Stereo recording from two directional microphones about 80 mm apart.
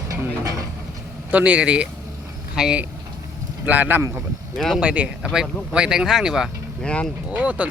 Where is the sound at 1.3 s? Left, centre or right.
Centre.